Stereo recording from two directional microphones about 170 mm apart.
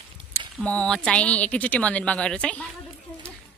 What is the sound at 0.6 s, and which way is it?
Speech, 5° left (ahead or behind).